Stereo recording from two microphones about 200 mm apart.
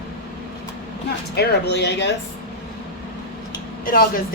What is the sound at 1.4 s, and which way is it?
Speech, 55° left (ahead or behind).